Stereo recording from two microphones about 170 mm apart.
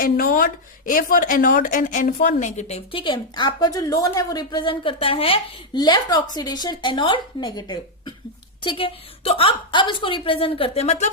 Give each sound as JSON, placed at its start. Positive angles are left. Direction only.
{"t": 0.0, "sound": "speech", "side_deg": 55}